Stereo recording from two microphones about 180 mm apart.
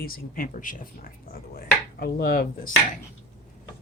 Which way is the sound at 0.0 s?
55° left (ahead or behind).